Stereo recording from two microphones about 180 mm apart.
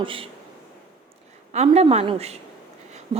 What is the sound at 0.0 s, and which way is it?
Speech, 30° right (ahead or behind).